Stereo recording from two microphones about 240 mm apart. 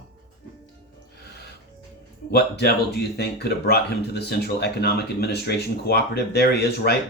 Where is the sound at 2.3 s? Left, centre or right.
Left.